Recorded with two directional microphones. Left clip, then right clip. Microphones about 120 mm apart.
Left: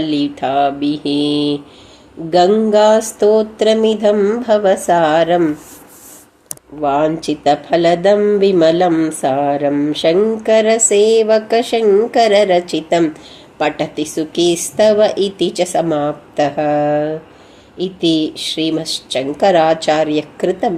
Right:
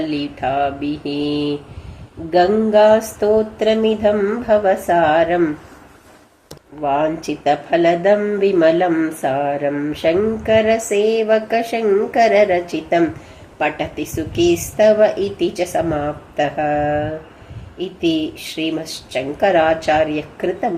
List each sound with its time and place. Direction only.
0.1 s mantra: 40° left (ahead or behind)
0.9 s mantra: 5° right (ahead or behind)
2.3 s speech: 40° left (ahead or behind)
6.8 s speech: 45° left (ahead or behind)
18.5 s speech: 40° left (ahead or behind)